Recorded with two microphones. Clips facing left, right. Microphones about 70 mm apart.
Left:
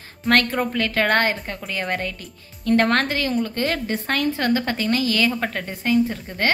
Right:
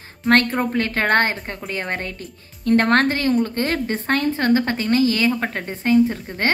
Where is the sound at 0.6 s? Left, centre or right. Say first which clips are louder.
Right 1 dB; right.